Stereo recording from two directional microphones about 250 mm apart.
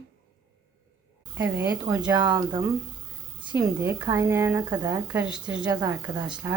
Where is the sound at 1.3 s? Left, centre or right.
Centre.